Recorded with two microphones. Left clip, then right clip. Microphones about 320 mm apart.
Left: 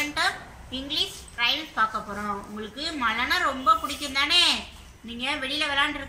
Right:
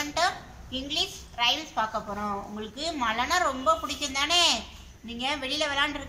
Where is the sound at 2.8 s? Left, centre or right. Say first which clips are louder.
Left 2 dB; centre.